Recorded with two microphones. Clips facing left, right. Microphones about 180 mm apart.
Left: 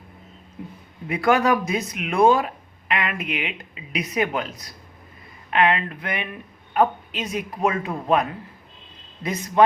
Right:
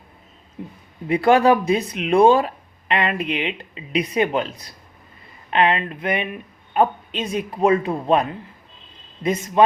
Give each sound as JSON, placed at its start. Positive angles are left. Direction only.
{"t": 1.0, "sound": "speech", "side_deg": -30}